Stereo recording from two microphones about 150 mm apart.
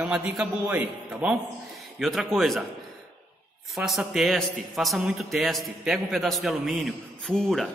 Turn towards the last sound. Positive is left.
turn(degrees=0)  # may be behind; listen again after turning